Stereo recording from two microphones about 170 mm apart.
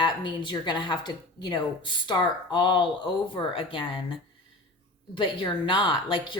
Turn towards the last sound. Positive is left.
turn(degrees=30)  # may be behind; listen again after turning